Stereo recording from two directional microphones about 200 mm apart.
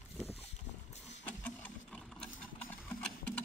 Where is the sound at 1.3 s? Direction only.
5° left (ahead or behind).